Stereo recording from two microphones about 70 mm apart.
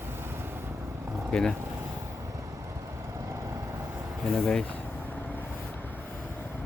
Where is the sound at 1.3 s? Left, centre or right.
Centre.